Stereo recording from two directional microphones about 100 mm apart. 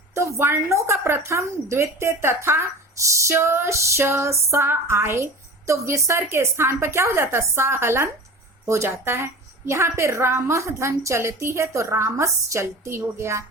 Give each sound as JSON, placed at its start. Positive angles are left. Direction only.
{"t": 0.1, "sound": "a woman's voice", "side_deg": -30}